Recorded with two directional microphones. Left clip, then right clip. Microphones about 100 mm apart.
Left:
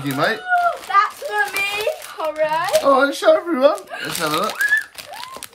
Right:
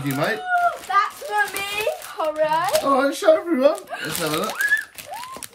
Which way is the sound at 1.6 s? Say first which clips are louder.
Left 3 dB; 10° right (ahead or behind).